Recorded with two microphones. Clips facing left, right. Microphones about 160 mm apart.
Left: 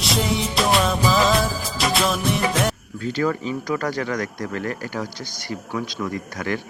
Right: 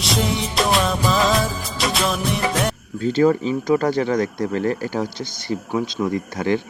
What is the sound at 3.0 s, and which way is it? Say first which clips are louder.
Speech: right 7 dB; 25° right (ahead or behind).